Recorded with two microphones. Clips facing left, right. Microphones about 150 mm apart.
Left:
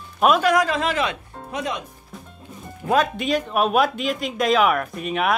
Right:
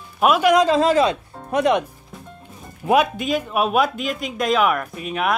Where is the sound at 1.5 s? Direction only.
65° right (ahead or behind).